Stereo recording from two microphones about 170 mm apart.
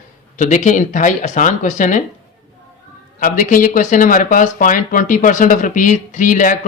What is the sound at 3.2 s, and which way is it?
Speech, 50° left (ahead or behind).